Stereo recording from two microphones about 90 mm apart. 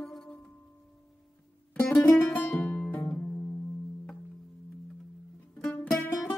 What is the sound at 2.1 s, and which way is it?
Music, 25° left (ahead or behind).